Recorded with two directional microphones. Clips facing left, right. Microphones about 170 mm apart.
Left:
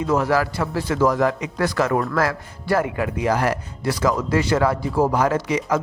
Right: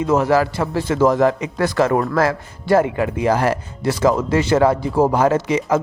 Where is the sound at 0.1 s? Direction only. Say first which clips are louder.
Right 4 dB; 25° right (ahead or behind).